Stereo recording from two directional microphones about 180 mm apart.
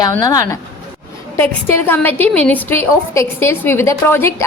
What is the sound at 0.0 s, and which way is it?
A woman's voice, 20° left (ahead or behind).